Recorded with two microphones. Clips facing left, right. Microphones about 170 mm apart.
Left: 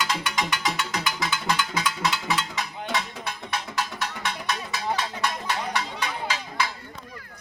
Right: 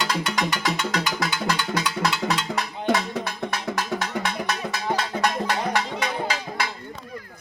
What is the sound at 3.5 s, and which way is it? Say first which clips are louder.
Cowbell: right 2 dB; 45° right (ahead or behind).